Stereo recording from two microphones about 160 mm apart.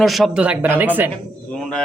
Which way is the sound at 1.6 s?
5° left (ahead or behind).